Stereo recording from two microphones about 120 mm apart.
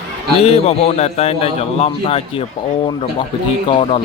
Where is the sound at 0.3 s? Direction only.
60° left (ahead or behind).